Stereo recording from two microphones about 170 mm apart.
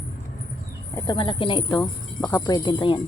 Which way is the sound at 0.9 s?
20° left (ahead or behind).